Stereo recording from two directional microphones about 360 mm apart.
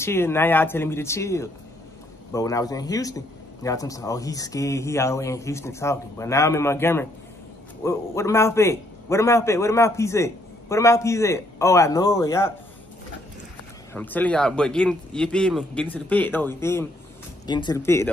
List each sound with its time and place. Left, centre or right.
0.0 s a man's voice: centre
13.9 s a man's voice: centre